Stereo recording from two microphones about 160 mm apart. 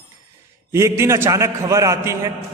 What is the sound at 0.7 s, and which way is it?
A man's voice, 15° right (ahead or behind).